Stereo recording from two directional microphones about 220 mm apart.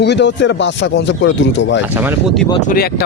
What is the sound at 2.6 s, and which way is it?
Speech, 45° left (ahead or behind).